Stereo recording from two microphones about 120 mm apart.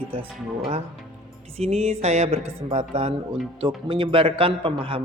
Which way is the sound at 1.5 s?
60° right (ahead or behind).